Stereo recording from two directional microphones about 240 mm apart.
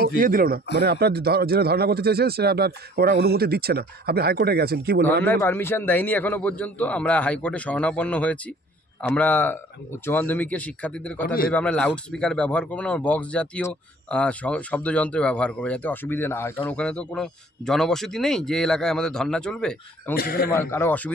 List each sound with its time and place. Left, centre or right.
0.2 s speech: right
5.2 s a man's voice: centre
20.2 s a man's voice: left
20.7 s a man's voice: centre